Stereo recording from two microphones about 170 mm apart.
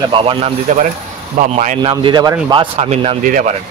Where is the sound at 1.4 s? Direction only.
50° right (ahead or behind).